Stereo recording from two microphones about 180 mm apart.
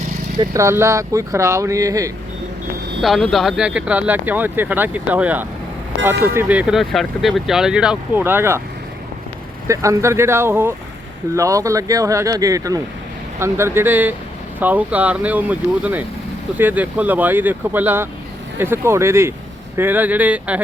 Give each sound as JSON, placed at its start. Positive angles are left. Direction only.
{"t": 0.3, "sound": "speech", "side_deg": -15}
{"t": 3.0, "sound": "speech", "side_deg": 0}
{"t": 9.6, "sound": "speech", "side_deg": -15}